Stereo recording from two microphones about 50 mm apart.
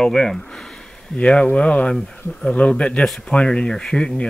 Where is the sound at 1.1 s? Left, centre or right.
Left.